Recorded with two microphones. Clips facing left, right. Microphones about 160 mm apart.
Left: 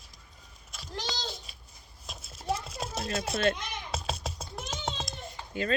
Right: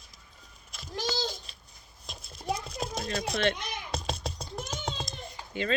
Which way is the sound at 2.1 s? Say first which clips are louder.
Even; 5° left (ahead or behind).